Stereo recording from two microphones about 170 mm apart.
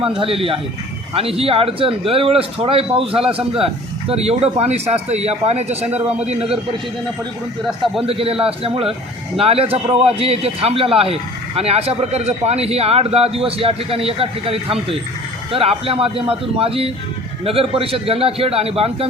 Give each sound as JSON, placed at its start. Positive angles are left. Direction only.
{"t": 0.0, "sound": "a man's voice", "side_deg": -30}
{"t": 8.0, "sound": "a man's voice", "side_deg": -35}